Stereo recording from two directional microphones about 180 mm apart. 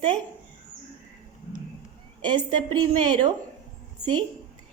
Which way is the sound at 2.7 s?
25° right (ahead or behind).